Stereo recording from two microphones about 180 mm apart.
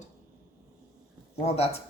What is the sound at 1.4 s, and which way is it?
Speech, 35° left (ahead or behind).